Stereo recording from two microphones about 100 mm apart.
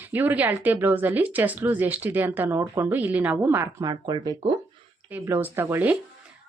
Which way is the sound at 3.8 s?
40° right (ahead or behind).